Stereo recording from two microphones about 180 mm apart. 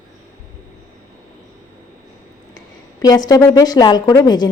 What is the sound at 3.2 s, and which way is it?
A woman's voice, 20° left (ahead or behind).